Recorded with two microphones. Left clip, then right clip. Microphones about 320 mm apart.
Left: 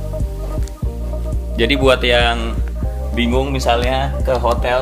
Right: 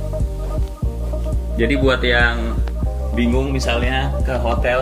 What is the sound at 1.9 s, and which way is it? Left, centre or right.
Speech, left.